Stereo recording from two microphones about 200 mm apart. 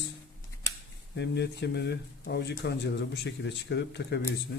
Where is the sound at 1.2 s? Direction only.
60° left (ahead or behind).